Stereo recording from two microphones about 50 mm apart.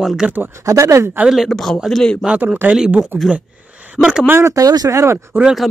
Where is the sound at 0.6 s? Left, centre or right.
Right.